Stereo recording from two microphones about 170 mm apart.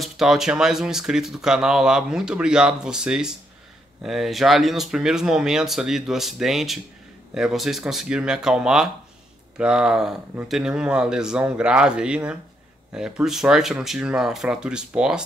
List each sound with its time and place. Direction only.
0.0 s speech: centre (ahead or behind)